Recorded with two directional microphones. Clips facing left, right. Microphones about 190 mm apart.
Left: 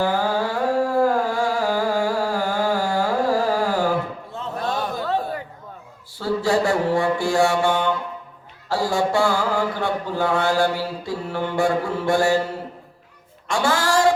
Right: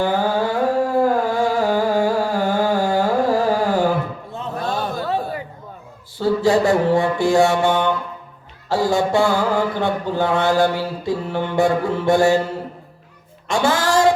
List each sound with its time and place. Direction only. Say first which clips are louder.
0.0 s music: right 2 dB; 20° right (ahead or behind)
5.0 s a sound: right 1 dB; 5° right (ahead or behind)
6.1 s mantra: right 4 dB; 20° right (ahead or behind)
13.5 s speech: right 3 dB; 20° right (ahead or behind)